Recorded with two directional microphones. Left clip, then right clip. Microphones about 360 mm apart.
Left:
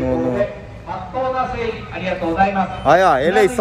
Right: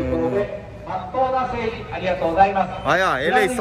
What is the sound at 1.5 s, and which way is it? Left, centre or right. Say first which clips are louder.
Speech: left 2 dB; right.